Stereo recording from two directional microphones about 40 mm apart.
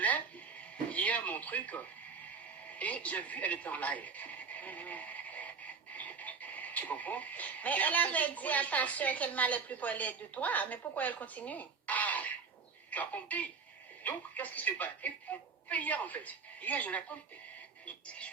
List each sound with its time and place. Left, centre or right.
0.9 s a woman's voice: left
17.8 s speech: left